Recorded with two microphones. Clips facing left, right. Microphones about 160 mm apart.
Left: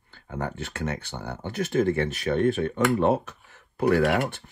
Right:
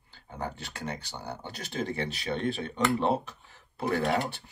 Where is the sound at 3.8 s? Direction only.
65° left (ahead or behind).